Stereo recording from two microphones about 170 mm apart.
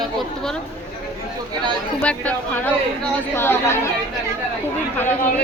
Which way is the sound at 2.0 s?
10° left (ahead or behind).